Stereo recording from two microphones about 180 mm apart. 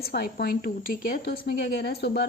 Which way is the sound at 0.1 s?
60° left (ahead or behind).